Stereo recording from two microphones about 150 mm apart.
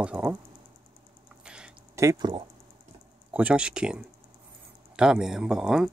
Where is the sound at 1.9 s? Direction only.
20° right (ahead or behind).